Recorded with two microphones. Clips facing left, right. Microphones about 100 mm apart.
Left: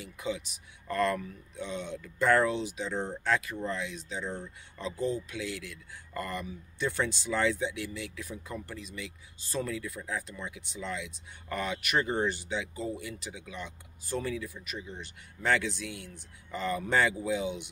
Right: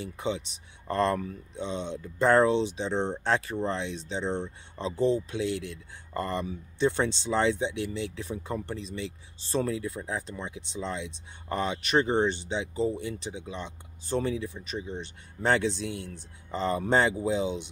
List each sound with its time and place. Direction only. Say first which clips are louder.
0.0 s speech: right 4 dB; 30° right (ahead or behind)
1.5 s speech: right 3 dB; 25° right (ahead or behind)